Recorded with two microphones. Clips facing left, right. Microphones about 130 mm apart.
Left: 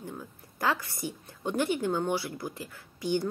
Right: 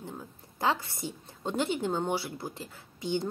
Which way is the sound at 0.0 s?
25° right (ahead or behind).